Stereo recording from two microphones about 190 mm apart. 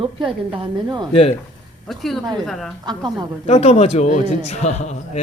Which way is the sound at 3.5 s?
35° left (ahead or behind).